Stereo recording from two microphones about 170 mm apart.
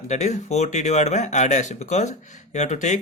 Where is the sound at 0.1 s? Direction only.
45° left (ahead or behind).